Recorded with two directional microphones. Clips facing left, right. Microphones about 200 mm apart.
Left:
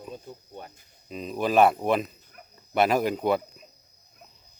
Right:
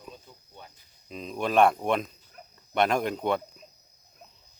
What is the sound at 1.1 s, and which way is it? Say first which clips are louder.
Speech: left 3 dB; 5° left (ahead or behind).